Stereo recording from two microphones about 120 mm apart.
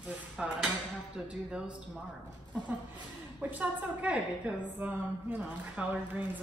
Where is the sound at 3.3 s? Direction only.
15° right (ahead or behind).